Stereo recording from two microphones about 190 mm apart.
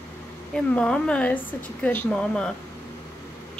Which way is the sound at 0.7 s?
5° left (ahead or behind).